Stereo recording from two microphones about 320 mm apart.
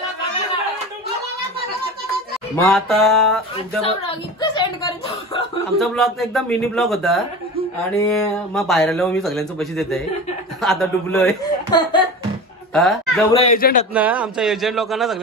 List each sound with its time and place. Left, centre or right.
2.5 s speech: centre
4.4 s speech: centre
5.8 s speech: centre
11.4 s chuckle: centre
12.7 s a woman's voice: centre
13.3 s a man's voice: centre
13.9 s speech: centre